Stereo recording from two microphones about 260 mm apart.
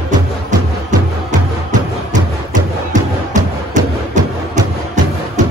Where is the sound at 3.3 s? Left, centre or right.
Right.